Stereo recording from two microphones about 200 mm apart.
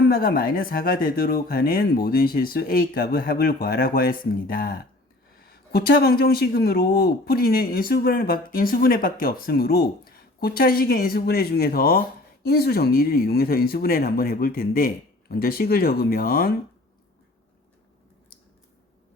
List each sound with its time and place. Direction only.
0.1 s speech: 45° left (ahead or behind)